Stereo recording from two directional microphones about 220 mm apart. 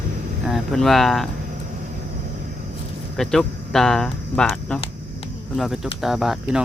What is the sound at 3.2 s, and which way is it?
Speech, centre (ahead or behind).